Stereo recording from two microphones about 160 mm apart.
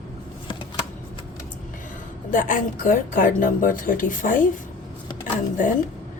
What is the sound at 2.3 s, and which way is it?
A woman's voice, 55° left (ahead or behind).